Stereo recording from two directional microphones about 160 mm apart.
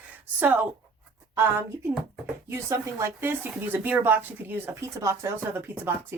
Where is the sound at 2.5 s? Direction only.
15° right (ahead or behind).